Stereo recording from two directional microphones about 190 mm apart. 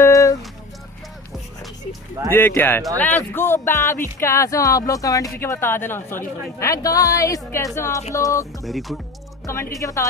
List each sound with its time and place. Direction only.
0.0 s a sound: 15° left (ahead or behind)
2.3 s a woman's voice: 10° left (ahead or behind)
8.6 s speech: centre (ahead or behind)
9.5 s a woman's voice: 15° left (ahead or behind)